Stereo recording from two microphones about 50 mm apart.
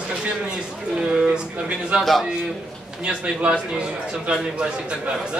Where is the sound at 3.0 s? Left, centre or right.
Right.